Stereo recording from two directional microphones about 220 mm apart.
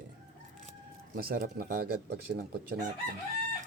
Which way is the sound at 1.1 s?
45° right (ahead or behind).